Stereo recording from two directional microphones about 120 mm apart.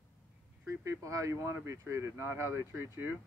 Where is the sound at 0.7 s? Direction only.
25° right (ahead or behind).